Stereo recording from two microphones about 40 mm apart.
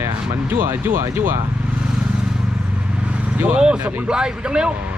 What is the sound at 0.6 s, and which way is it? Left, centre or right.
Speech, right.